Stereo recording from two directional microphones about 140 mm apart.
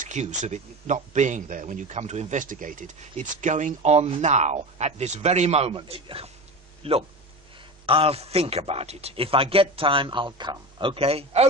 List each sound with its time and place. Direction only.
0.0 s a man's voice: 60° right (ahead or behind)